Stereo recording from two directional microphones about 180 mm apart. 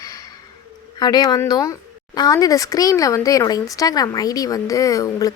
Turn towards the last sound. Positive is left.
turn(degrees=20)  # may be behind; listen again after turning